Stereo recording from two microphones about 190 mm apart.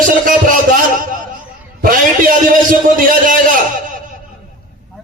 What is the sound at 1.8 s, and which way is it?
A man's voice, 50° right (ahead or behind).